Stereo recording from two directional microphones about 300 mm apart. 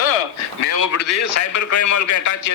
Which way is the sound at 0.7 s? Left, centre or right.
Left.